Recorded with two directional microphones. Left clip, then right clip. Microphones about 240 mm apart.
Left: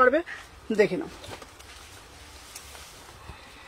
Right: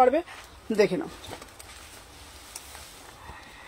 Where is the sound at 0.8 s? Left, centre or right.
Centre.